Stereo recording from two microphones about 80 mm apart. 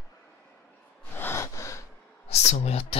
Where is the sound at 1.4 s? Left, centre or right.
Left.